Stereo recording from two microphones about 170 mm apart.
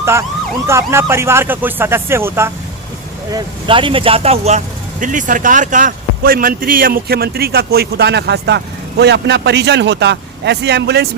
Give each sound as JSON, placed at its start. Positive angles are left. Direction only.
{"t": 0.0, "sound": "emergency vehicle", "side_deg": -15}
{"t": 0.7, "sound": "speech", "side_deg": -15}
{"t": 3.3, "sound": "speech", "side_deg": -30}